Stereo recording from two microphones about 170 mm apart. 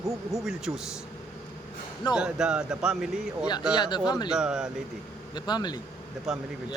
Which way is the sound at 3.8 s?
25° left (ahead or behind).